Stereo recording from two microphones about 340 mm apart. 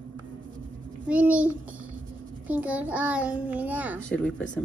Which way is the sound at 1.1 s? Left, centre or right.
Centre.